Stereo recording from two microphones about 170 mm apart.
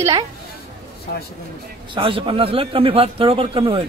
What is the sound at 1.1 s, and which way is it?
Speech, 65° left (ahead or behind).